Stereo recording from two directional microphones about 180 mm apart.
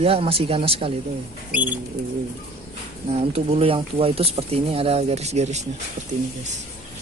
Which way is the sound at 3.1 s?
35° right (ahead or behind).